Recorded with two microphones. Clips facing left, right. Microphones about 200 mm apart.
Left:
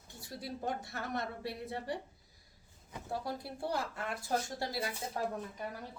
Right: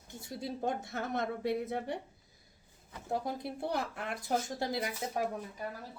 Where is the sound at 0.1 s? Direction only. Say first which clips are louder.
Right 4 dB; 25° right (ahead or behind).